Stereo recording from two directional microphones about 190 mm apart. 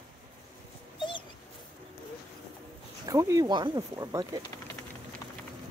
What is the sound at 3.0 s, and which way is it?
Speech, 20° right (ahead or behind).